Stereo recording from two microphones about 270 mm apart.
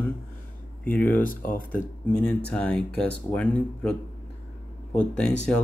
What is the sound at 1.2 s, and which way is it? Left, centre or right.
Speech, left.